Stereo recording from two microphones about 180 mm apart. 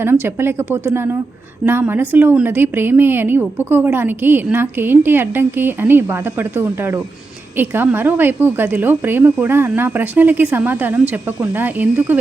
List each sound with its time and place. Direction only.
0.0 s a woman's voice: 10° right (ahead or behind)